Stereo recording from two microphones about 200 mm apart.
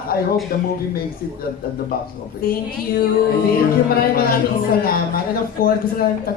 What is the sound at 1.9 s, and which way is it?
A woman's voice, 50° left (ahead or behind).